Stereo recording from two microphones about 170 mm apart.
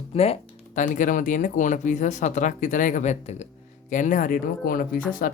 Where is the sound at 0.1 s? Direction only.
35° left (ahead or behind).